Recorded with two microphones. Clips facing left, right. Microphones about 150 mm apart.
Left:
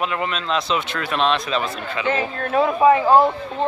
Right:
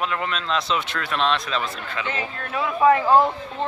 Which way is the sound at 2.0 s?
40° left (ahead or behind).